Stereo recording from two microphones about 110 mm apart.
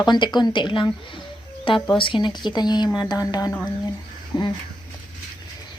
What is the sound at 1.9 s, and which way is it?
Speech, 50° left (ahead or behind).